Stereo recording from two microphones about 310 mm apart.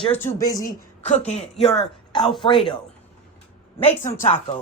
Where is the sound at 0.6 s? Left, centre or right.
Left.